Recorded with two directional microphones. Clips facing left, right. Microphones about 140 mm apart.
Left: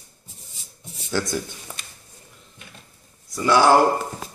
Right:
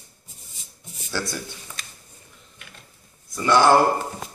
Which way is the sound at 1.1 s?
20° left (ahead or behind).